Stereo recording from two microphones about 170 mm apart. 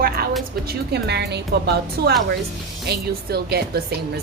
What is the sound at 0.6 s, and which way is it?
A woman's voice, 75° right (ahead or behind).